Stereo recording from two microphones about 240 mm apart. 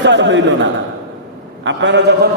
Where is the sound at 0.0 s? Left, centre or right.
Right.